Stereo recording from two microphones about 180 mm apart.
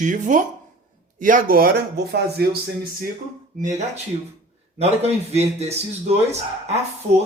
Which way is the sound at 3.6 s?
40° right (ahead or behind).